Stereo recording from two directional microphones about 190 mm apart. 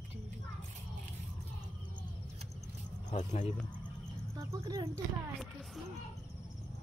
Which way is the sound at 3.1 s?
35° left (ahead or behind).